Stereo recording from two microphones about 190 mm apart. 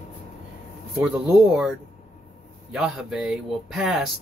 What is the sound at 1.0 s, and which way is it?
Speech, 5° right (ahead or behind).